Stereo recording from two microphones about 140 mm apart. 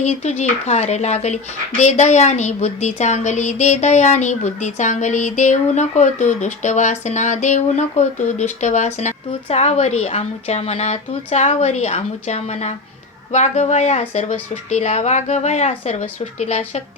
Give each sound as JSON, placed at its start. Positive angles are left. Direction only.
{"t": 0.0, "sound": "a woman's voice", "side_deg": 55}